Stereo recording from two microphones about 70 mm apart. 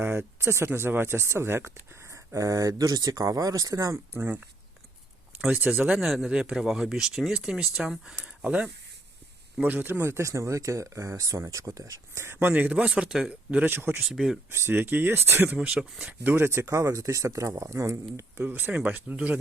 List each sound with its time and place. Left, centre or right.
0.0 s speech: right
4.1 s speech: right
5.5 s speech: right
6.0 s speech: centre
13.7 s speech: right
14.0 s speech: centre
14.5 s speech: right
15.7 s speech: centre
16.2 s speech: right
16.6 s speech: right
18.3 s speech: right
18.7 s speech: centre